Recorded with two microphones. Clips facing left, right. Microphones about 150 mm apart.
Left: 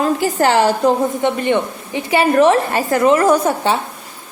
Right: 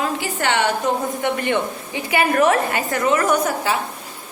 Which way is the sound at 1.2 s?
20° left (ahead or behind).